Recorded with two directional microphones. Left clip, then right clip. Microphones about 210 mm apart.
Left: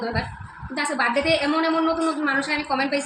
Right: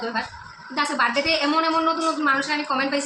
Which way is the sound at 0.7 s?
15° right (ahead or behind).